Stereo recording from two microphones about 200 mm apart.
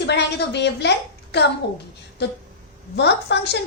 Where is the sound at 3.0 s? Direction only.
60° left (ahead or behind).